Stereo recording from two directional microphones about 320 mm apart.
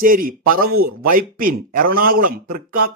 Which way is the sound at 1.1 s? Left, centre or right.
Right.